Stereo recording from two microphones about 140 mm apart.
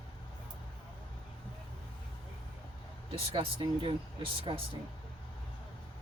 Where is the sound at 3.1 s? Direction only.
35° right (ahead or behind).